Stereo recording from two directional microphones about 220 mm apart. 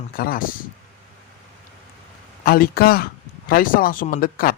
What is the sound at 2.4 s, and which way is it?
Speech, 40° left (ahead or behind).